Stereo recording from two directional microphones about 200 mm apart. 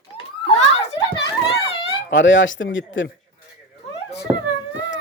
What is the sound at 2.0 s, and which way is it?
Speech, 65° left (ahead or behind).